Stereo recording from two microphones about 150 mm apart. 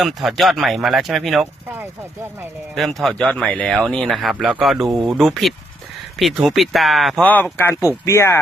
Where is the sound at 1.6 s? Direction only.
15° right (ahead or behind).